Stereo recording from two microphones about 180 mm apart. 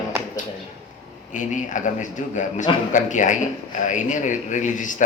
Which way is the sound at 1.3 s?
45° left (ahead or behind).